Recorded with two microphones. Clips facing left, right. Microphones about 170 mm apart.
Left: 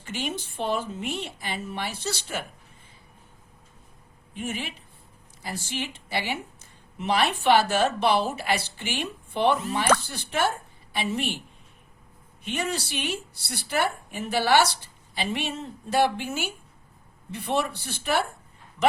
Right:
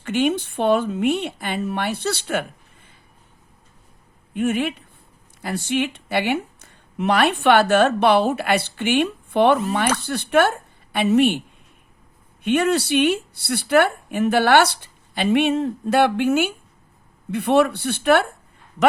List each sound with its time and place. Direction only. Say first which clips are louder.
0.0 s speech: right 12 dB; 60° right (ahead or behind)
4.4 s speech: right 12 dB; 60° right (ahead or behind)